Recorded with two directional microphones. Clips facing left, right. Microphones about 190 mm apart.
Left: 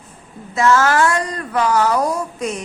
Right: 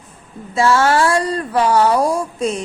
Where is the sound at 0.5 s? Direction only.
30° right (ahead or behind).